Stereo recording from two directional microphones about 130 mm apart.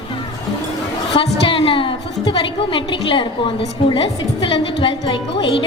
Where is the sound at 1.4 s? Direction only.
45° left (ahead or behind).